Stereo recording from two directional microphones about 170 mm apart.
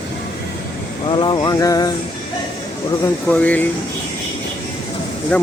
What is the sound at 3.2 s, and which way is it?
Speech, 10° left (ahead or behind).